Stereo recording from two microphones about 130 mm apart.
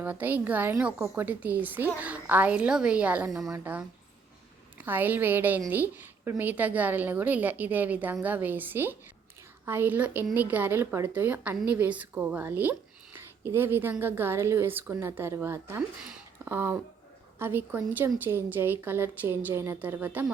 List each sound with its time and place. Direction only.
0.0 s a woman's voice: 15° right (ahead or behind)
4.9 s a woman's voice: 15° right (ahead or behind)
13.1 s a sound: 20° right (ahead or behind)
13.9 s a woman's voice: 15° right (ahead or behind)